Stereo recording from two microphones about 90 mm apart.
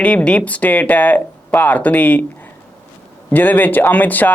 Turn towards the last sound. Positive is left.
turn(degrees=20)  # may be behind; listen again after turning